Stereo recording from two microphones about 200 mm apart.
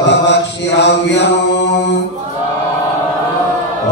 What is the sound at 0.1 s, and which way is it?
Mantra, 60° left (ahead or behind).